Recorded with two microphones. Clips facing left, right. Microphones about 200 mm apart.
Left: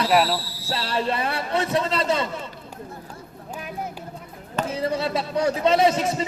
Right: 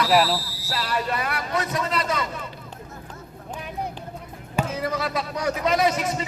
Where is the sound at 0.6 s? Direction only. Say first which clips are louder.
Left 2 dB; 25° left (ahead or behind).